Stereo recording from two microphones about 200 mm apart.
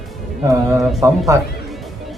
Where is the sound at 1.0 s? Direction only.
15° right (ahead or behind).